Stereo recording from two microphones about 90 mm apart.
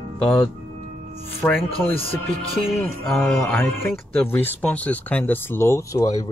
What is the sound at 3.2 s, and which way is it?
Speech, 25° left (ahead or behind).